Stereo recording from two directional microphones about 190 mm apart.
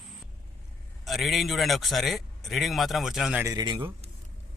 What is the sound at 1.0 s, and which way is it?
A man's voice, centre (ahead or behind).